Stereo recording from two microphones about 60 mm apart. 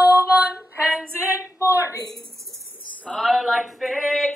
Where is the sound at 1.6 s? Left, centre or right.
Left.